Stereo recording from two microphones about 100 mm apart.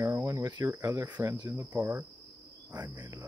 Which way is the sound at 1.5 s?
25° right (ahead or behind).